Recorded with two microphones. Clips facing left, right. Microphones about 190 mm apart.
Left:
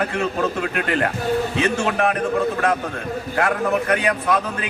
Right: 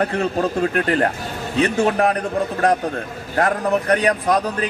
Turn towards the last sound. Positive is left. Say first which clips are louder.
# right 2 dB
turn(degrees=-35)  # may be behind; listen again after turning